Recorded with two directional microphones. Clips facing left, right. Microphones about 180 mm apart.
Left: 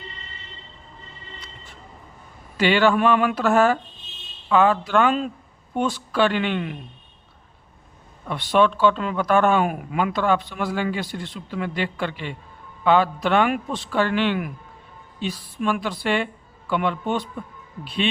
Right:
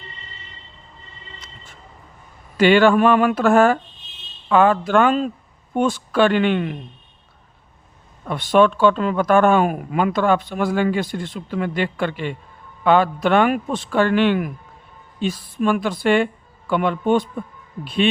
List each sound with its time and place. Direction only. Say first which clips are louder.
2.6 s speech: right 5 dB; 50° right (ahead or behind)
8.3 s speech: right 4 dB; 45° right (ahead or behind)